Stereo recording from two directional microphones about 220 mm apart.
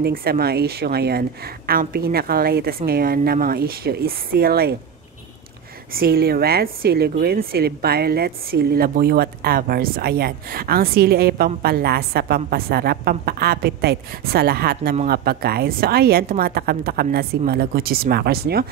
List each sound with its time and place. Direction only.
0.0 s a woman's voice: 45° right (ahead or behind)
5.9 s a woman's voice: 45° right (ahead or behind)